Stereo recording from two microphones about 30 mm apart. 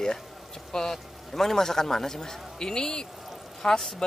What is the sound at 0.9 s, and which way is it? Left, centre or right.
A man's voice, centre.